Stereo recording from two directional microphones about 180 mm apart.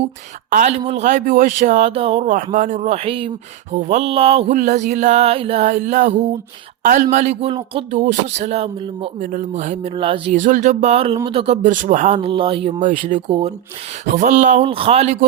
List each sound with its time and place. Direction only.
0.5 s speech: 40° right (ahead or behind)
2.2 s speech: 45° right (ahead or behind); by 3.3 s 30° right (ahead or behind)
3.8 s speech: 40° right (ahead or behind)
4.5 s speech: 40° right (ahead or behind)
7.9 s speech: 40° right (ahead or behind)
12.8 s speech: 45° right (ahead or behind)